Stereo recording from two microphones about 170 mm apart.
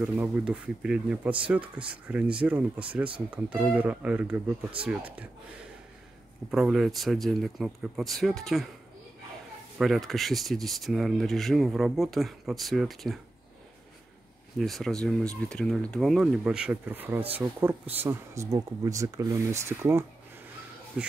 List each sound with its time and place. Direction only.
0.0 s speech: 5° right (ahead or behind)
6.5 s speech: centre (ahead or behind)
9.8 s speech: centre (ahead or behind)
14.6 s speech: centre (ahead or behind)